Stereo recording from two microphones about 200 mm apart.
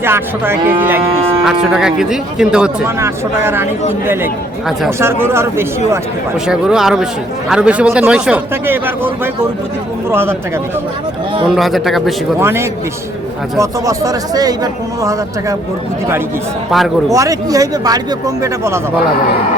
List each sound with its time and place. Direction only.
0.0 s speech: 10° right (ahead or behind)
10.1 s speech: 10° right (ahead or behind)
11.4 s speech: centre (ahead or behind)
12.4 s speech: 15° right (ahead or behind)
17.1 s speech: 15° right (ahead or behind)